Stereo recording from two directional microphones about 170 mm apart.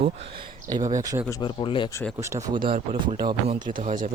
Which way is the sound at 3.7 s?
50° right (ahead or behind).